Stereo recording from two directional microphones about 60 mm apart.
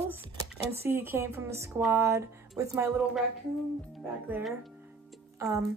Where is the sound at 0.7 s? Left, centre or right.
Right.